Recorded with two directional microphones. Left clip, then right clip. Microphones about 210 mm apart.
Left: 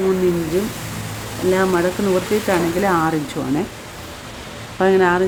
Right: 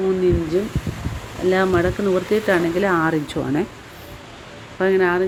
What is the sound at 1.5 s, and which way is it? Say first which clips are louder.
Speech: left 1 dB; 20° right (ahead or behind).